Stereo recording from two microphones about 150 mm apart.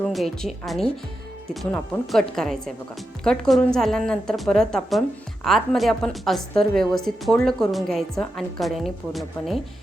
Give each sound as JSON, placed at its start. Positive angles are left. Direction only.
{"t": 0.1, "sound": "a woman's voice", "side_deg": 0}